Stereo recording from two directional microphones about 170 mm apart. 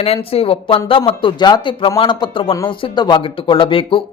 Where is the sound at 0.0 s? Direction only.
35° left (ahead or behind).